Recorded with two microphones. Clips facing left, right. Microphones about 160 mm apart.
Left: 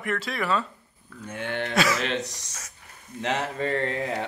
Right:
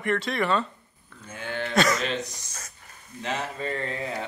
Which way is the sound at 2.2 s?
75° left (ahead or behind).